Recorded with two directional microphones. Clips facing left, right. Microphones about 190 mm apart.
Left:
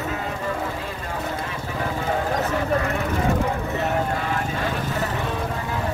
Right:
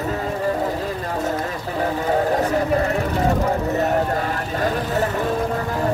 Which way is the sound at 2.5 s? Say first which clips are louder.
Right 4 dB; 40° right (ahead or behind).